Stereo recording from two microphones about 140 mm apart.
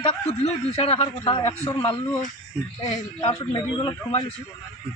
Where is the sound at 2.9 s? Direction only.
50° left (ahead or behind).